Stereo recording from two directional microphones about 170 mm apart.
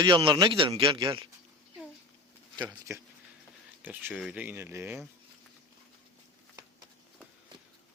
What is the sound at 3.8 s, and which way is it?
Speech, 10° right (ahead or behind).